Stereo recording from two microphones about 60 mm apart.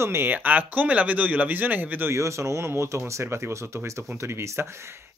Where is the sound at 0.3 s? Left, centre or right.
Right.